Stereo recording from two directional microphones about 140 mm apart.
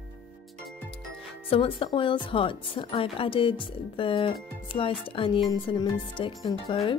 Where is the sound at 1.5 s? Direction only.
40° left (ahead or behind).